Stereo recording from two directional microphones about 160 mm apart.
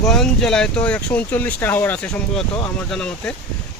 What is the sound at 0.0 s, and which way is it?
Speech, 5° left (ahead or behind).